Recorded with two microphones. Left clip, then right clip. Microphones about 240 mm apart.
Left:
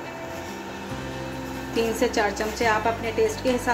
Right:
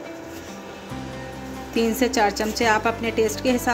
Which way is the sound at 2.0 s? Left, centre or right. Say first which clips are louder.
Right 4 dB; right.